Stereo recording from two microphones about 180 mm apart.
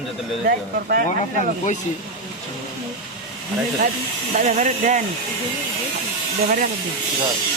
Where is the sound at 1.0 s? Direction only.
40° left (ahead or behind).